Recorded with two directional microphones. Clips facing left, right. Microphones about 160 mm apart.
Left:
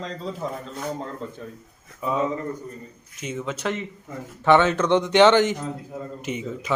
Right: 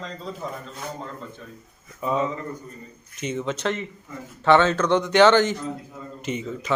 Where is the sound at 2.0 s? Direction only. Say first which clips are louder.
Left 1 dB; 5° left (ahead or behind).